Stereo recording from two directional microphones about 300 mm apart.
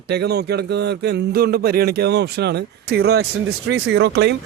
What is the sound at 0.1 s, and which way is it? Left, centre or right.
Speech, right.